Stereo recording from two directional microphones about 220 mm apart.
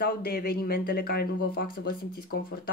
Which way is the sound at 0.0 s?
45° left (ahead or behind).